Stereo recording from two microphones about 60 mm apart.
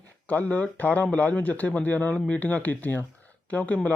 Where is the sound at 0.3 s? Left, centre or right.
Left.